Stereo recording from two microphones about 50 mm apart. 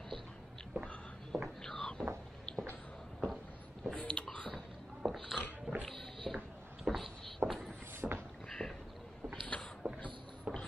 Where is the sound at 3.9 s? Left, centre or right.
Left.